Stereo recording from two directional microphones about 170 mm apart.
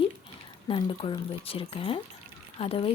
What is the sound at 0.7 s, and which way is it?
Speech, 30° left (ahead or behind).